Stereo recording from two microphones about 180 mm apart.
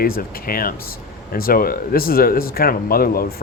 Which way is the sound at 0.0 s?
55° left (ahead or behind).